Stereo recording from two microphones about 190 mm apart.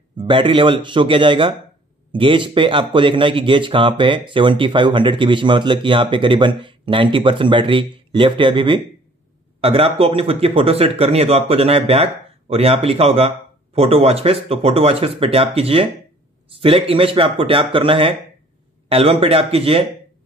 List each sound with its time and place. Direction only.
0.2 s speech: 25° right (ahead or behind)